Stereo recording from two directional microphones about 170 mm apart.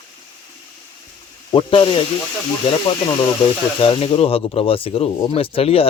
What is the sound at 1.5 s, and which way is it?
Speech, 30° left (ahead or behind).